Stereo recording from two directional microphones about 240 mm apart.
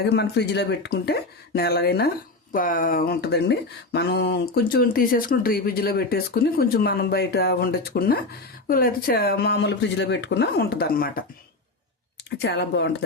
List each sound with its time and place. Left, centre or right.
0.0 s speech: left
12.4 s speech: left